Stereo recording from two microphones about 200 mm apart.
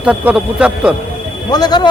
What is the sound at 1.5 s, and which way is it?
Speech, 20° left (ahead or behind).